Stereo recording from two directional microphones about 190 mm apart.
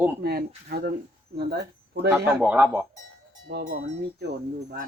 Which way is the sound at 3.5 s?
55° right (ahead or behind).